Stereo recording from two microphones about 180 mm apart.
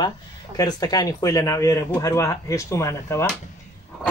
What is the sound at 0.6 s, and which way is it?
Speech, 20° left (ahead or behind).